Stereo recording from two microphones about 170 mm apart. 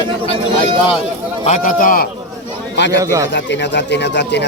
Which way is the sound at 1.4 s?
45° left (ahead or behind).